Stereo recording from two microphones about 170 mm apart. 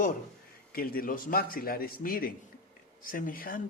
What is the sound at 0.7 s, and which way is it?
A man's voice, 60° left (ahead or behind).